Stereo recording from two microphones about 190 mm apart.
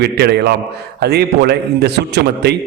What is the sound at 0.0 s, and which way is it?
A man's voice, 60° right (ahead or behind).